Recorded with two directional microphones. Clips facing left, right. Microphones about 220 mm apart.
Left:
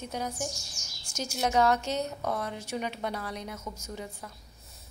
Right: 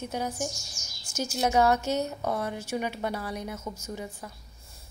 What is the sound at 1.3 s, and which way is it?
A woman's voice, 10° right (ahead or behind).